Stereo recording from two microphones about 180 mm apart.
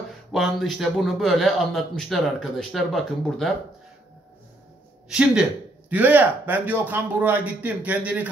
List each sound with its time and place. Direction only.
0.3 s a man's voice: centre (ahead or behind)
5.1 s a man's voice: 5° right (ahead or behind)